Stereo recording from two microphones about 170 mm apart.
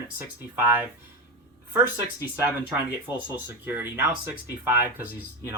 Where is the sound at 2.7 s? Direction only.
10° right (ahead or behind).